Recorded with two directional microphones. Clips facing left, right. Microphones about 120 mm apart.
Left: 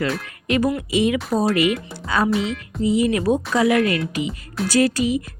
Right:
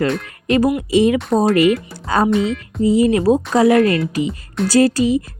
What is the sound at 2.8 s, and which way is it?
Speech, 35° right (ahead or behind).